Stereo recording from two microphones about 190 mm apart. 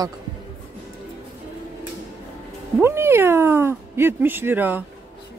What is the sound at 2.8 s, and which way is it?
Speech, 15° right (ahead or behind).